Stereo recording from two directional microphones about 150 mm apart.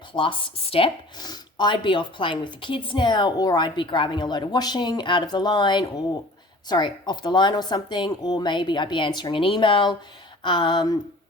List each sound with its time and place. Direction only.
0.1 s speech: 35° left (ahead or behind)